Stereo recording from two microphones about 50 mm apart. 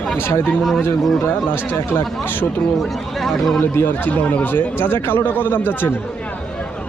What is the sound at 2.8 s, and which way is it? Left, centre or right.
Speech, centre.